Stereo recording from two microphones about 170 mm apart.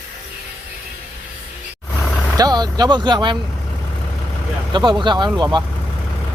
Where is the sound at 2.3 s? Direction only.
25° right (ahead or behind).